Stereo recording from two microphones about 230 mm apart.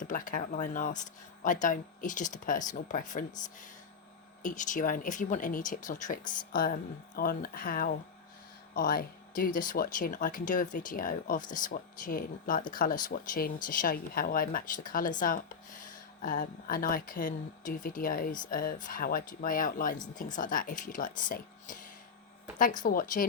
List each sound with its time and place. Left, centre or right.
0.0 s speech: left
4.4 s speech: left